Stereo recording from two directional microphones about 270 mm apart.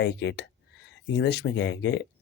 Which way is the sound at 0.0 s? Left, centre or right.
Left.